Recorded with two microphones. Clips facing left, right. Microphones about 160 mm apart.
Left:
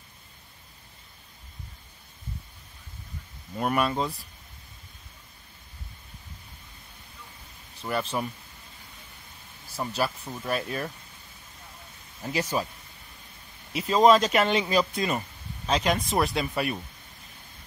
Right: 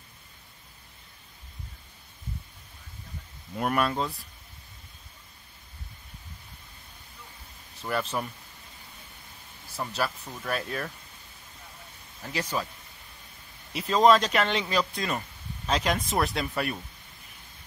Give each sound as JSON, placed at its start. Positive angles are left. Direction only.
{"t": 3.5, "sound": "speech", "side_deg": 0}
{"t": 7.8, "sound": "speech", "side_deg": 0}
{"t": 9.8, "sound": "speech", "side_deg": 10}
{"t": 12.2, "sound": "speech", "side_deg": 20}
{"t": 13.7, "sound": "speech", "side_deg": 5}